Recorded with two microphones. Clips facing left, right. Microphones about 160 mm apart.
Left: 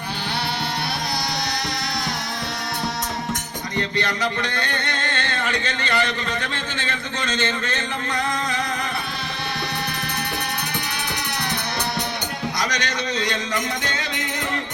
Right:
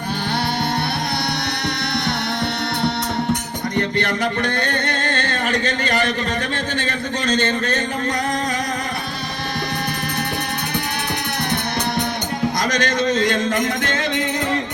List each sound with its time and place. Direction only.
3.8 s music: 55° right (ahead or behind)
6.7 s speech: 40° right (ahead or behind)
12.5 s a man's voice: 50° right (ahead or behind)